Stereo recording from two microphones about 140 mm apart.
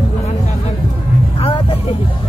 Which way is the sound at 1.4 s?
40° left (ahead or behind).